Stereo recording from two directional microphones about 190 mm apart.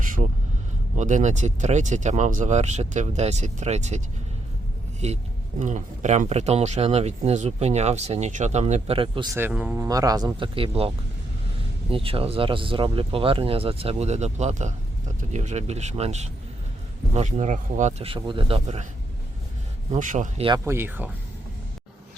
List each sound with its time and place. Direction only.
0.2 s vehicle: 45° right (ahead or behind)
0.9 s speech: 40° right (ahead or behind)
5.0 s speech: 35° right (ahead or behind)
9.3 s speech: 10° right (ahead or behind); by 18.9 s 30° right (ahead or behind)
19.9 s speech: 40° right (ahead or behind)
20.7 s speech: 10° right (ahead or behind)